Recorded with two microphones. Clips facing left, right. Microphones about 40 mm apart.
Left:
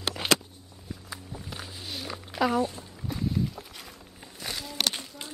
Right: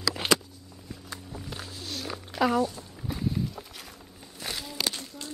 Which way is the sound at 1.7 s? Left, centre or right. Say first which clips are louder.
Right 1 dB; centre.